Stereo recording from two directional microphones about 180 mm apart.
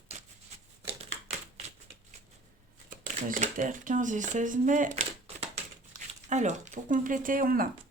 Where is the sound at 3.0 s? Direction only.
45° right (ahead or behind).